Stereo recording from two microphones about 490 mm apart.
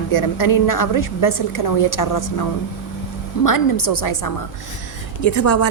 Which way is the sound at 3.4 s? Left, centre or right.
Left.